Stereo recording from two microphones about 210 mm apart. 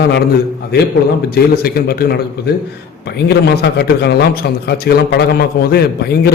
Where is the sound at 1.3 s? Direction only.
45° left (ahead or behind).